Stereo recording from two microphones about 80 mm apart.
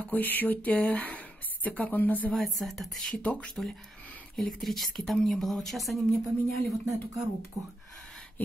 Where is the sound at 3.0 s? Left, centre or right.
Centre.